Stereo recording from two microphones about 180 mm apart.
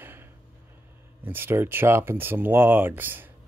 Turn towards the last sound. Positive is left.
turn(degrees=-10)  # may be behind; listen again after turning